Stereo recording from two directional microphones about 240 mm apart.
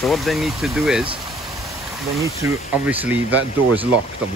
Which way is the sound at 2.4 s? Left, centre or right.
Centre.